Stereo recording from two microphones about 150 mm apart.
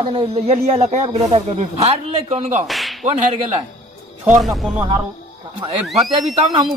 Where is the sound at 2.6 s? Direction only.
Centre (ahead or behind).